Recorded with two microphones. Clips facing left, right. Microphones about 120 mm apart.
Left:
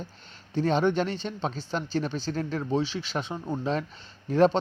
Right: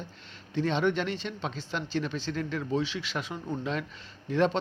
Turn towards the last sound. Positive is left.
turn(degrees=40)  # may be behind; listen again after turning